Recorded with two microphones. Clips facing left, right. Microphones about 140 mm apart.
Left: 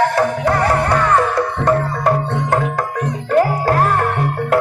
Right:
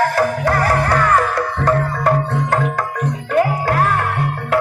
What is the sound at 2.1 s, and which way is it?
Music, 10° left (ahead or behind).